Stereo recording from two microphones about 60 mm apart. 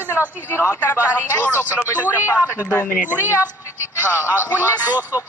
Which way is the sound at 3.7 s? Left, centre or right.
Right.